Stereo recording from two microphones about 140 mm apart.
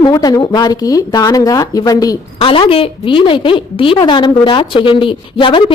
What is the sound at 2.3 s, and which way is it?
A woman's voice, 40° left (ahead or behind).